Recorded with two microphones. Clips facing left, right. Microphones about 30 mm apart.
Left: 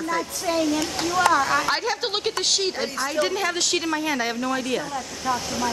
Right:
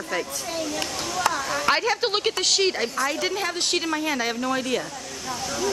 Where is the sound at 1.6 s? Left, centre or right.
Centre.